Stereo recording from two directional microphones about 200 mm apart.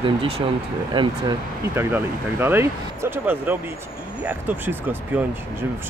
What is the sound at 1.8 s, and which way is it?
Speech, 10° right (ahead or behind).